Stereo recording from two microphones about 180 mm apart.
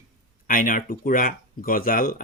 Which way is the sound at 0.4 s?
50° left (ahead or behind).